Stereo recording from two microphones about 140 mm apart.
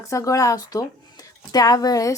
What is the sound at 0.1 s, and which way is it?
A woman's voice, 25° left (ahead or behind).